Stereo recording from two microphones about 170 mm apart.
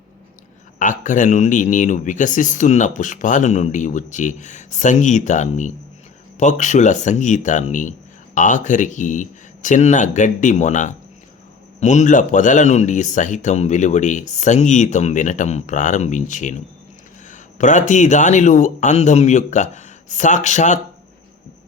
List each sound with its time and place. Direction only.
0.8 s speech: 50° left (ahead or behind)